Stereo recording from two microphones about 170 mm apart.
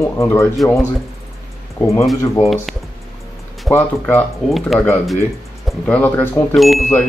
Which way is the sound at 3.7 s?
10° left (ahead or behind).